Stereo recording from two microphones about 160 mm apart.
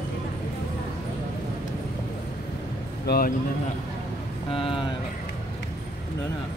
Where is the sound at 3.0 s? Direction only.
70° left (ahead or behind).